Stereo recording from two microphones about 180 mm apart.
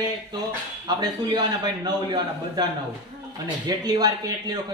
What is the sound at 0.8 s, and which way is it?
A man's voice, 20° right (ahead or behind).